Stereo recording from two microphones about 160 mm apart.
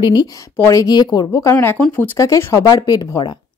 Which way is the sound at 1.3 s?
15° left (ahead or behind).